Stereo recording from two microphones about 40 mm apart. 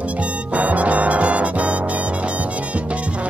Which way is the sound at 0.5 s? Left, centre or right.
Right.